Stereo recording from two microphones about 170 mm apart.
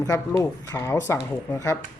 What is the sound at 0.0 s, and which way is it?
Speech, 20° left (ahead or behind).